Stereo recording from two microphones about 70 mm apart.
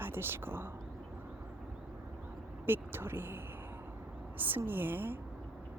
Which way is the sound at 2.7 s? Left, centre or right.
Right.